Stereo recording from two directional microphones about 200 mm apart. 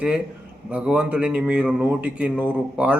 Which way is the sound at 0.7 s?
5° right (ahead or behind).